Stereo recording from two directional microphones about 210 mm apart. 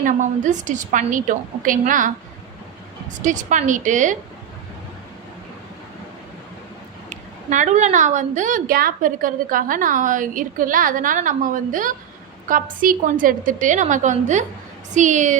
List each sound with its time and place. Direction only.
0.0 s a woman's voice: 35° right (ahead or behind)
3.2 s a woman's voice: 35° right (ahead or behind)
7.1 s a woman's voice: 35° right (ahead or behind)